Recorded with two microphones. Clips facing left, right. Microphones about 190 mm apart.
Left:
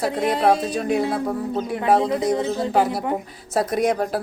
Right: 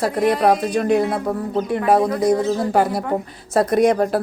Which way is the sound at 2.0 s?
20° left (ahead or behind).